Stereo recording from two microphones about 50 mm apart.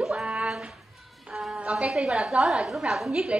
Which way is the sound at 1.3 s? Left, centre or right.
Centre.